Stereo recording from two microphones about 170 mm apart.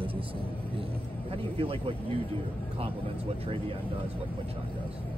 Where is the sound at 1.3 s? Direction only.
35° right (ahead or behind).